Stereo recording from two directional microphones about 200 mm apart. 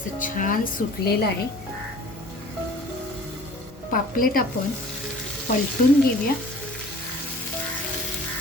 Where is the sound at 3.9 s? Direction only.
45° left (ahead or behind).